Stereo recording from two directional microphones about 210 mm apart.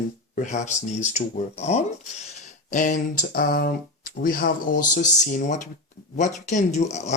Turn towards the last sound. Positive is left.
turn(degrees=35)  # may be behind; listen again after turning